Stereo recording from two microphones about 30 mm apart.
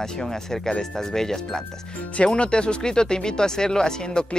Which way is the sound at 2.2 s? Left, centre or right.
Left.